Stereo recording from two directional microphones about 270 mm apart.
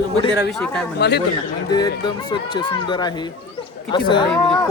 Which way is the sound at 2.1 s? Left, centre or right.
Centre.